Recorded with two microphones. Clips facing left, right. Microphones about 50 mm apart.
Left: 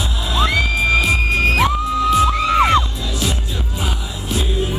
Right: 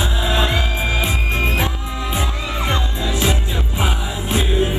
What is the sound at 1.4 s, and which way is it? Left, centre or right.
Music, left.